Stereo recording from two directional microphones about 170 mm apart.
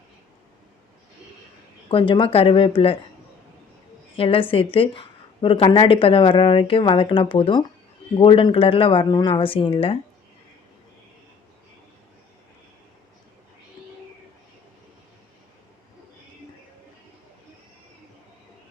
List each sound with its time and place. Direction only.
1.9 s a woman's voice: 30° left (ahead or behind)
4.2 s a woman's voice: 30° left (ahead or behind)